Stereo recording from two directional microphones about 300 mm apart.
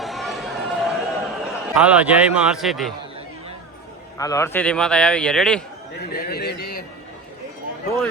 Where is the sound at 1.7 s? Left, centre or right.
Centre.